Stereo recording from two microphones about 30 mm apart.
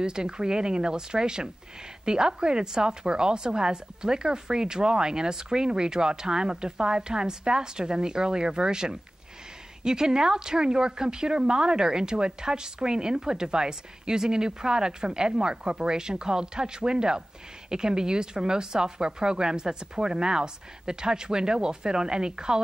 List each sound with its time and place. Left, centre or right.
0.0 s a woman's voice: right